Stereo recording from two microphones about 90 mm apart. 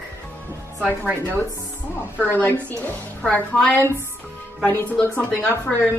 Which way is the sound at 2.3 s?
20° left (ahead or behind).